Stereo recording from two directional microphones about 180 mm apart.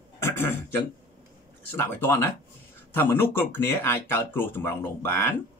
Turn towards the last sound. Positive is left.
turn(degrees=10)  # may be behind; listen again after turning